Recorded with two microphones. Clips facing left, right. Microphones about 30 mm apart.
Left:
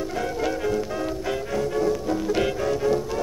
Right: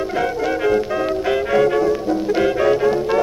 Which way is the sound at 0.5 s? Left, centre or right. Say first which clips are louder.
Right 7 dB; right.